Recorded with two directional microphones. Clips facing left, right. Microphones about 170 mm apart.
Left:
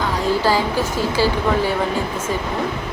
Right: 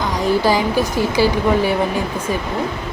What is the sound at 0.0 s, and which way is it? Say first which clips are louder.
A woman's voice: right 2 dB; 15° right (ahead or behind).